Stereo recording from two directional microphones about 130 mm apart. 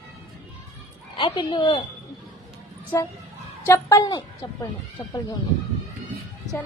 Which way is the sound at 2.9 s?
20° left (ahead or behind).